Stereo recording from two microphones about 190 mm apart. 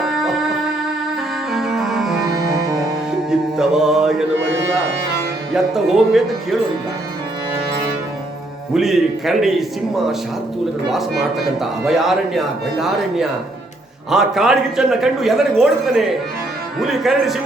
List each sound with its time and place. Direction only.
1.5 s music: centre (ahead or behind)
3.2 s music: 5° right (ahead or behind)
5.5 s speech: centre (ahead or behind)
8.7 s speech: centre (ahead or behind)